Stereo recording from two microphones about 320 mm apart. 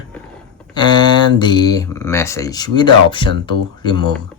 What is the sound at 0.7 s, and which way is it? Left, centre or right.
Speech, centre.